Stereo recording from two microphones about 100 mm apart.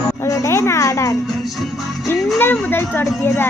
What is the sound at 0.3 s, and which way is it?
Music, 30° left (ahead or behind).